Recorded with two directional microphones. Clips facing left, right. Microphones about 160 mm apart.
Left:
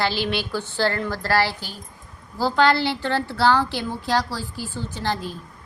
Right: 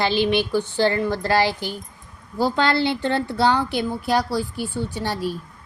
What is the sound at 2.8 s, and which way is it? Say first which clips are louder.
A woman's voice: right 2 dB; 20° right (ahead or behind).